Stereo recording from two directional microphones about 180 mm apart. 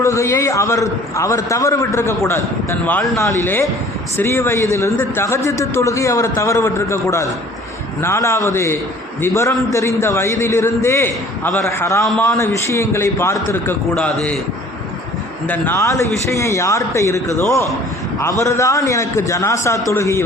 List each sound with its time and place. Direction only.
0.0 s a man's voice: 15° left (ahead or behind)
12.0 s a man's voice: 5° left (ahead or behind)
15.4 s a man's voice: 10° left (ahead or behind)